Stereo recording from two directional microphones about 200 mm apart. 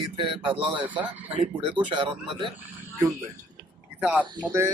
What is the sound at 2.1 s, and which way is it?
Speech, 5° right (ahead or behind).